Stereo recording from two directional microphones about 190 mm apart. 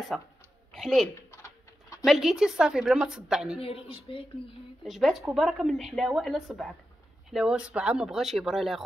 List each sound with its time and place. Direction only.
0.1 s speech: centre (ahead or behind)
1.1 s a sound: 15° left (ahead or behind)
2.0 s speech: centre (ahead or behind)
3.5 s a man's voice: 30° left (ahead or behind)
4.8 s speech: centre (ahead or behind)